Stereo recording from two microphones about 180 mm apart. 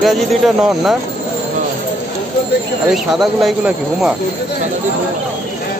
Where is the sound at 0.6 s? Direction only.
Centre (ahead or behind).